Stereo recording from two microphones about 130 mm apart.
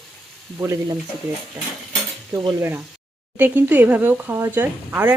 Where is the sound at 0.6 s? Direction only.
20° right (ahead or behind).